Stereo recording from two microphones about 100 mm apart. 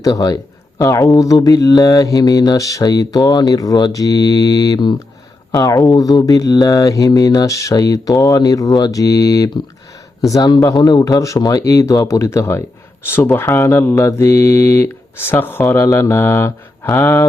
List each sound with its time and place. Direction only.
0.0 s speech: 35° left (ahead or behind)